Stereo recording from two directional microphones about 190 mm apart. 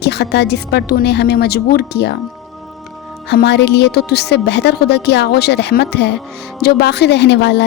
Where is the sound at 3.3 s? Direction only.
60° left (ahead or behind).